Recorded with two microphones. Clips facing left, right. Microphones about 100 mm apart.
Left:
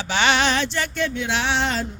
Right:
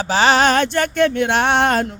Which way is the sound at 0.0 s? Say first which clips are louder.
Right 6 dB; 35° right (ahead or behind).